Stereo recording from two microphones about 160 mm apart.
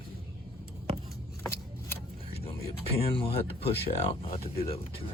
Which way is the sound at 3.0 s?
35° left (ahead or behind).